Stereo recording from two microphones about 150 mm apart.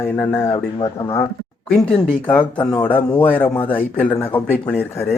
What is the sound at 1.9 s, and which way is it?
Speech, 5° left (ahead or behind).